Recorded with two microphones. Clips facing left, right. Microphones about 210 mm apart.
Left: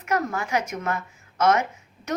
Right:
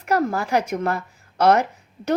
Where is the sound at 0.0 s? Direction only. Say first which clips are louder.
Right 5 dB; 35° right (ahead or behind).